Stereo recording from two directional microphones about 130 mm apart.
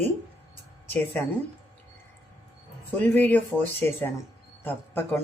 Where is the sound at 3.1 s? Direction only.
15° left (ahead or behind).